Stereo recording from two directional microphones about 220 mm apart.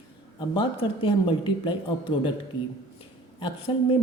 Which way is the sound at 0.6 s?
25° left (ahead or behind).